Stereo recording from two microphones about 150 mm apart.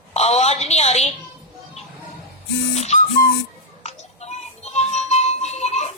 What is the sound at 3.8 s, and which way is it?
Music, 45° left (ahead or behind).